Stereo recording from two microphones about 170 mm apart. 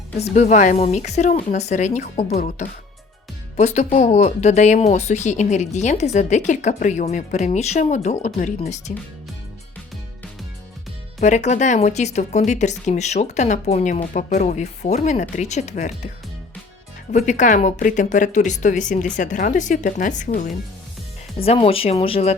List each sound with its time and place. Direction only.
0.2 s speech: 40° left (ahead or behind)
11.2 s speech: 45° left (ahead or behind)
17.1 s speech: 45° left (ahead or behind)
21.4 s speech: 35° left (ahead or behind)